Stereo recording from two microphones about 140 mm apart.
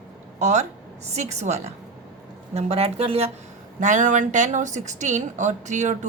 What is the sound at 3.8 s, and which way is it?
A woman's voice, 60° right (ahead or behind).